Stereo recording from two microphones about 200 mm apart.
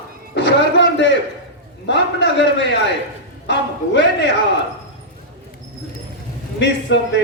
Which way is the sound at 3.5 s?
65° left (ahead or behind).